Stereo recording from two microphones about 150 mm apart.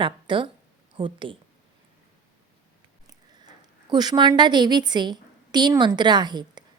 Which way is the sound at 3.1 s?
25° right (ahead or behind).